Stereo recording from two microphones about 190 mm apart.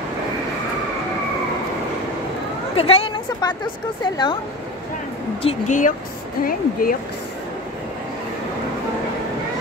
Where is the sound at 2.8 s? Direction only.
30° left (ahead or behind).